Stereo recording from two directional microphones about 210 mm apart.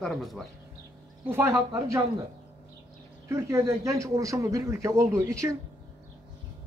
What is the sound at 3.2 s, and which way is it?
A man's voice, 15° right (ahead or behind).